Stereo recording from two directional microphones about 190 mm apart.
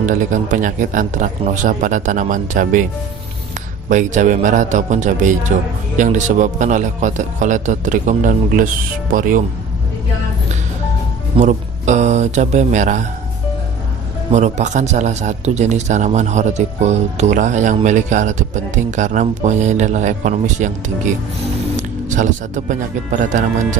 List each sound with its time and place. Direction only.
0.0 s speech: 40° right (ahead or behind)
3.8 s speech: 40° right (ahead or behind)
11.3 s speech: 40° right (ahead or behind)
14.3 s speech: 35° right (ahead or behind)